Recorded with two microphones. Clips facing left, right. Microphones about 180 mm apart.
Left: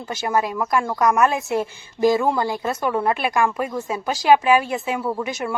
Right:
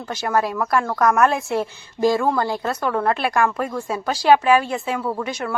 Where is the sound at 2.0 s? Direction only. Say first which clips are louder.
Even; 15° left (ahead or behind).